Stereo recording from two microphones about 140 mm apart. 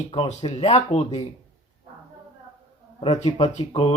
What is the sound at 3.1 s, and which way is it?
Speech, 30° left (ahead or behind).